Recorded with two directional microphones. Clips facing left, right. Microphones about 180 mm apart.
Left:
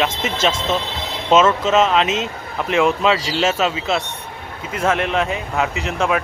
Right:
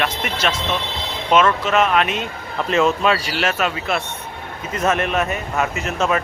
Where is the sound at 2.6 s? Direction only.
15° left (ahead or behind).